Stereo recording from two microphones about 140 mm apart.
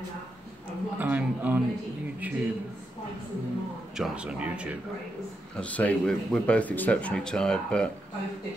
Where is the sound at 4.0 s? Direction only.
10° right (ahead or behind).